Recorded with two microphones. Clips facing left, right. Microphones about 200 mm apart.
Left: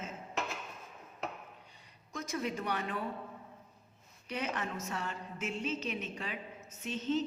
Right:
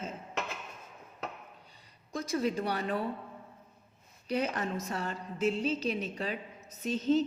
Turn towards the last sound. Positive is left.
turn(degrees=-35)  # may be behind; listen again after turning